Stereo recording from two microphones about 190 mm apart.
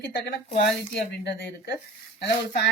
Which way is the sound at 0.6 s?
60° left (ahead or behind).